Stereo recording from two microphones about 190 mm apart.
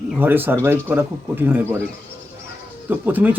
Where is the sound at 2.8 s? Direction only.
10° right (ahead or behind).